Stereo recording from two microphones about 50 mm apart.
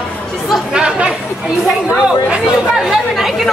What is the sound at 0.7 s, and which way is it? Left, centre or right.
Chatter, centre.